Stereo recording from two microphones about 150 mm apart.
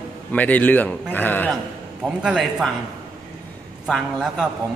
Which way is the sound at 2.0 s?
5° right (ahead or behind).